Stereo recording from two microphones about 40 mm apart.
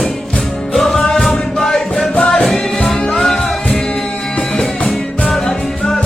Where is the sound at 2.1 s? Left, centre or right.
Left.